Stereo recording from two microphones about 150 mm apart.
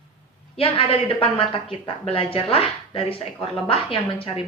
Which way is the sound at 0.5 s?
40° left (ahead or behind).